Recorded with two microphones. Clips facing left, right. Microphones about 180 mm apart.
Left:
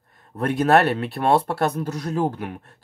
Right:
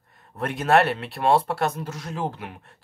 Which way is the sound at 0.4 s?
40° left (ahead or behind).